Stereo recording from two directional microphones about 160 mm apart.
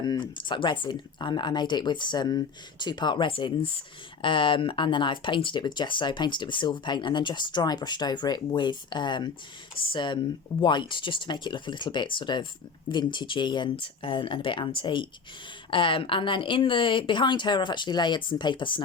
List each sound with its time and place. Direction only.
0.0 s speech: 30° left (ahead or behind)